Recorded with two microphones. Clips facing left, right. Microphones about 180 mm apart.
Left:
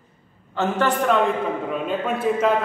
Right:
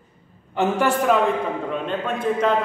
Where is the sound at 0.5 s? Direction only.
10° right (ahead or behind).